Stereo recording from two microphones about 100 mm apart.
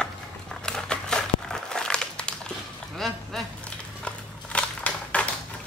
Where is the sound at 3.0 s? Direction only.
5° left (ahead or behind).